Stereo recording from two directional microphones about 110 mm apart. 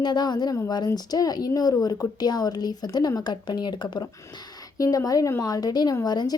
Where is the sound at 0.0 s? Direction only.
40° left (ahead or behind).